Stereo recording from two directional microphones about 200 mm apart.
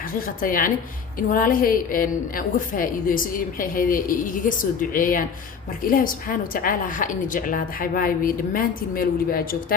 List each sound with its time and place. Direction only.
0.1 s a woman's voice: 45° left (ahead or behind)